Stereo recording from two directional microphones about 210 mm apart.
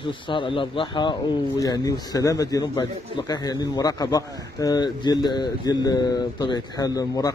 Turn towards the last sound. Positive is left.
turn(degrees=15)  # may be behind; listen again after turning